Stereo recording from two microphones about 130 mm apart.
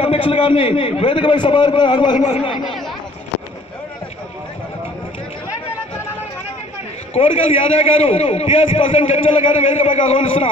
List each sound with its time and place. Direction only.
0.0 s a man's voice: 40° left (ahead or behind)
7.2 s a man's voice: 50° left (ahead or behind)